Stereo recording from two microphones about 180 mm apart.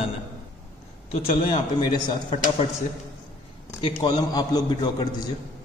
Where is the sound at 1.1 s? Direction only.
25° left (ahead or behind).